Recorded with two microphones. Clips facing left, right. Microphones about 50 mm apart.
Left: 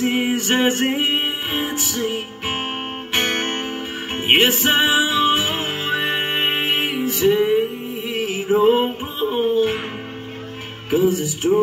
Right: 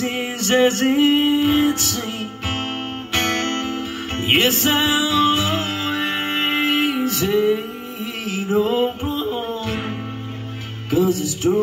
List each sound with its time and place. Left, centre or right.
0.0 s music: centre
3.1 s music: centre
10.9 s music: left